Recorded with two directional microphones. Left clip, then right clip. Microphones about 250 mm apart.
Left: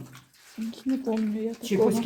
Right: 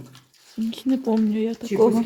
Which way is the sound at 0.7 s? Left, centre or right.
Right.